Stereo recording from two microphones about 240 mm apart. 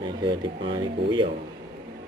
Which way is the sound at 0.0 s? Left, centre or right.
Centre.